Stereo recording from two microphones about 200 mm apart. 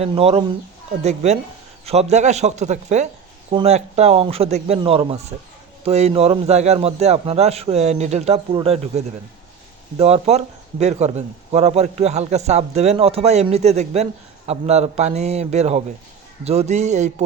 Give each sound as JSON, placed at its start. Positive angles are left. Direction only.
{"t": 0.0, "sound": "a man's voice", "side_deg": -30}